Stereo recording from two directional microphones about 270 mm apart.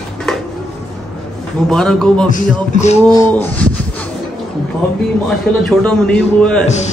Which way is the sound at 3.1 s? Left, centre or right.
Centre.